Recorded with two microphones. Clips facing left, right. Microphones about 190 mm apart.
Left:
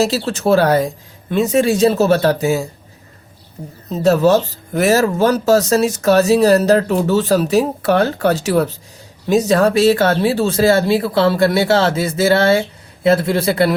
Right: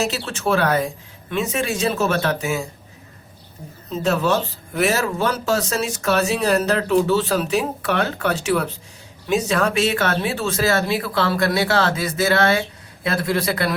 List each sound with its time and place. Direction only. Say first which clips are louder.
0.0 s speech: left 7 dB; 35° left (ahead or behind)
4.0 s speech: left 8 dB; 40° left (ahead or behind)